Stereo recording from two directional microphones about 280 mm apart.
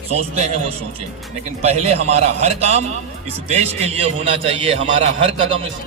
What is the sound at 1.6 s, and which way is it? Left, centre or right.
A man's voice, right.